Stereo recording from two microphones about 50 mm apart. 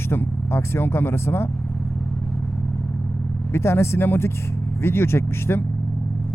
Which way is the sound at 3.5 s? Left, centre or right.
Left.